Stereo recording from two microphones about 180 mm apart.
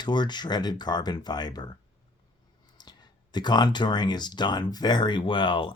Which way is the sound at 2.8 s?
25° left (ahead or behind).